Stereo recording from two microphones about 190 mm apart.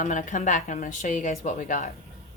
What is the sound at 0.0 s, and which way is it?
A woman's voice, 40° left (ahead or behind).